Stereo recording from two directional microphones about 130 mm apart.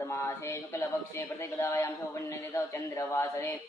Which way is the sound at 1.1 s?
20° left (ahead or behind).